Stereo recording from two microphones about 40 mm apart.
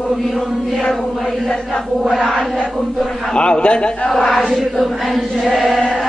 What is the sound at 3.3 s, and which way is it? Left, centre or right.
Speech, left.